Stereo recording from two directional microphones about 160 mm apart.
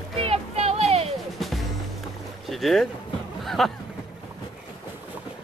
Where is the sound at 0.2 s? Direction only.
40° right (ahead or behind).